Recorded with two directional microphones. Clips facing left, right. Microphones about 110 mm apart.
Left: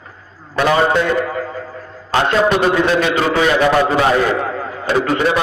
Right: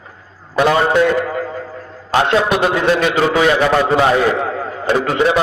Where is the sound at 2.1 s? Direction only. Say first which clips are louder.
Even; 15° right (ahead or behind).